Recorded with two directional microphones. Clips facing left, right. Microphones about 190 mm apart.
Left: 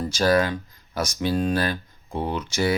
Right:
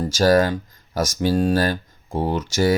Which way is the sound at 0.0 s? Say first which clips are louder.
Right 4 dB; 45° right (ahead or behind).